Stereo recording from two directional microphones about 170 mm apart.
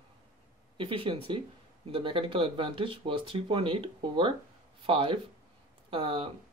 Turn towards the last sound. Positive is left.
turn(degrees=-30)  # may be behind; listen again after turning